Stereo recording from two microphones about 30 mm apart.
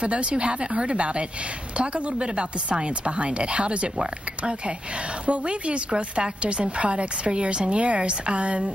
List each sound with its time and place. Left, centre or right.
0.0 s a woman's voice: right
5.2 s a woman's voice: right